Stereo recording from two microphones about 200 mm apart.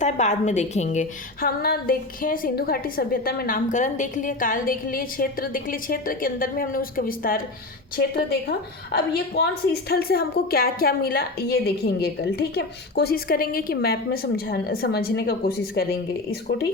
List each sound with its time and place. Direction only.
0.0 s a woman's voice: 35° left (ahead or behind); by 16.6 s 50° left (ahead or behind)